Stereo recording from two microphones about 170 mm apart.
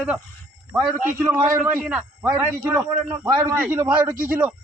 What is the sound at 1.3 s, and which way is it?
A man's voice, 10° right (ahead or behind).